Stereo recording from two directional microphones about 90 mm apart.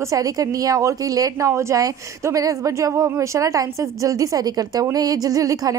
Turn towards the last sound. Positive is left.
turn(degrees=-40)  # may be behind; listen again after turning